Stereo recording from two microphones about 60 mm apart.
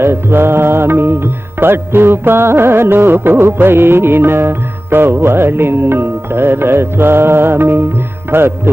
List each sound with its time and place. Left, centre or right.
0.0 s music: right